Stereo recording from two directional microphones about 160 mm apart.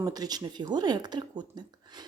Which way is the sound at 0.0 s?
25° right (ahead or behind).